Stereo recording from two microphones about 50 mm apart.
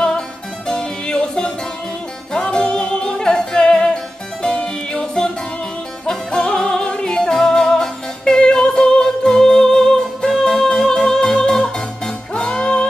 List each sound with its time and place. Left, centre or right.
0.7 s music: centre
6.0 s music: centre